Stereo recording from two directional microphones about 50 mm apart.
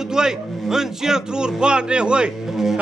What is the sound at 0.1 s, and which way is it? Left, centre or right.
Speech, centre.